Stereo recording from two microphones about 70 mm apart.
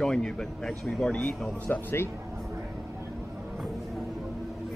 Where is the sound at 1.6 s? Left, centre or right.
Left.